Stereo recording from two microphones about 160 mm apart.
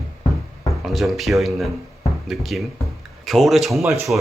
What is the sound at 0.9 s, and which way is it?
Speech, centre (ahead or behind).